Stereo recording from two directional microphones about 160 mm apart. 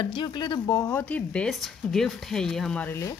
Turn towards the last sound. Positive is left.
turn(degrees=15)  # may be behind; listen again after turning